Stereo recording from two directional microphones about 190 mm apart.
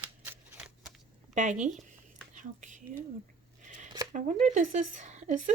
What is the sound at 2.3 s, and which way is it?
Whispering, 40° right (ahead or behind).